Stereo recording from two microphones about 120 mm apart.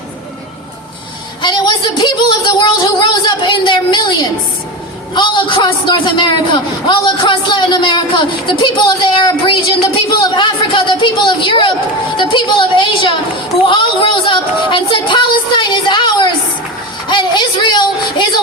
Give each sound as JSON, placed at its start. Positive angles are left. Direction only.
{"t": 1.4, "sound": "a man's voice", "side_deg": 40}